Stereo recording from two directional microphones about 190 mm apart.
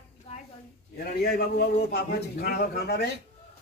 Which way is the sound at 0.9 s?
55° left (ahead or behind).